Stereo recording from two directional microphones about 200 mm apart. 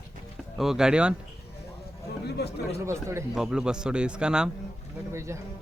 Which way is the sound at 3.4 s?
5° right (ahead or behind).